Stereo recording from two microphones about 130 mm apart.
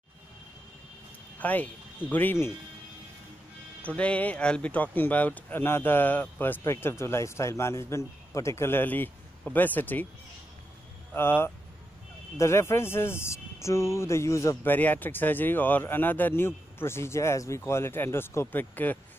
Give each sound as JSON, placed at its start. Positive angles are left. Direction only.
{"t": 1.4, "sound": "speech", "side_deg": 10}
{"t": 3.8, "sound": "speech", "side_deg": 10}
{"t": 11.1, "sound": "speech", "side_deg": 15}